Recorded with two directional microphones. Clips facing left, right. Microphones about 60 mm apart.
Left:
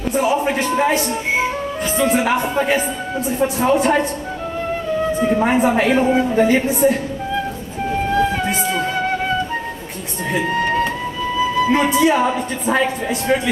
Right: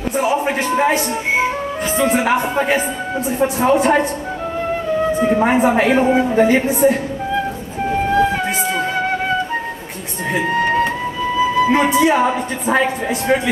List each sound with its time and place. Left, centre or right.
0.1 s speech: centre
5.3 s a woman's voice: right
6.8 s music: right
11.3 s a woman's voice: right